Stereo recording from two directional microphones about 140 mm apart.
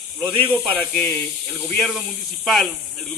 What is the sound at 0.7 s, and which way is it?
Speech, 10° left (ahead or behind).